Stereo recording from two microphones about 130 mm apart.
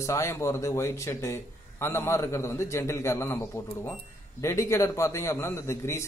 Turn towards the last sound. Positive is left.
turn(degrees=20)  # may be behind; listen again after turning